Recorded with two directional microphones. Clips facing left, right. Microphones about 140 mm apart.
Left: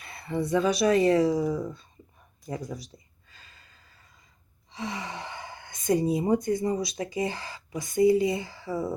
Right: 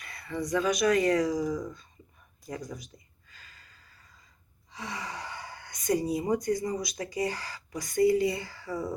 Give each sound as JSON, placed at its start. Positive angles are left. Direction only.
{"t": 0.0, "sound": "speech", "side_deg": 25}
{"t": 2.5, "sound": "a sound", "side_deg": 30}
{"t": 4.7, "sound": "speech", "side_deg": 25}